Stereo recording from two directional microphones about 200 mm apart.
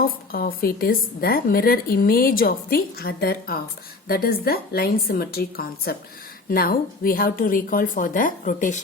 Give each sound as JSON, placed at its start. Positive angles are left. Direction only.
{"t": 0.0, "sound": "a woman's voice", "side_deg": 45}